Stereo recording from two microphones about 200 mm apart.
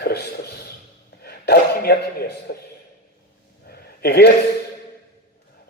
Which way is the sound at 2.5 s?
55° left (ahead or behind).